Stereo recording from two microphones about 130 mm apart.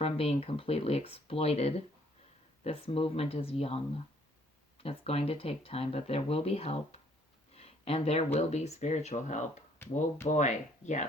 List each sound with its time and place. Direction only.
0.0 s speech: 50° left (ahead or behind); by 9.6 s 65° left (ahead or behind)
9.7 s speech: 15° left (ahead or behind)
10.2 s speech: 65° left (ahead or behind)